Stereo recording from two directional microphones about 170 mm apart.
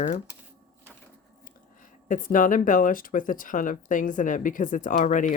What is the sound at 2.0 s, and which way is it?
Speech, 50° left (ahead or behind).